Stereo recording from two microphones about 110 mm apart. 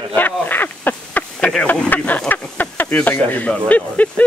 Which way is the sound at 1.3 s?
5° left (ahead or behind).